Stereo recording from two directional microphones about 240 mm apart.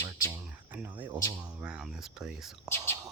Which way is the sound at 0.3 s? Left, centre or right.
Centre.